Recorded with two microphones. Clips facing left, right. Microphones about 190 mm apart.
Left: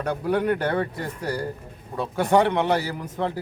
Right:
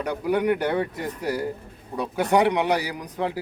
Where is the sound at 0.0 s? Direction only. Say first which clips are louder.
Even; 15° right (ahead or behind).